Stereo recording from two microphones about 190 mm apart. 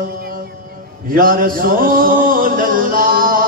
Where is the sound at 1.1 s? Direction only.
50° right (ahead or behind).